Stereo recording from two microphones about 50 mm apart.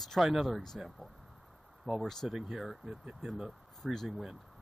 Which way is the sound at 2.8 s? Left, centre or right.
Centre.